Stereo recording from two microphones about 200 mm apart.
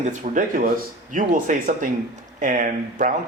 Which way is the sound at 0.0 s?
40° right (ahead or behind).